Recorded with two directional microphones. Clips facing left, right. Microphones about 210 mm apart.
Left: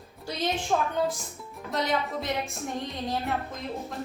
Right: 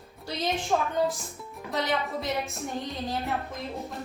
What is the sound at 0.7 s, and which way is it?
A woman's voice, centre (ahead or behind).